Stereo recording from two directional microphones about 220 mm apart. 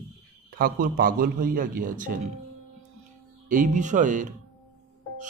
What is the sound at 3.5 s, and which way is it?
Speech, 35° right (ahead or behind).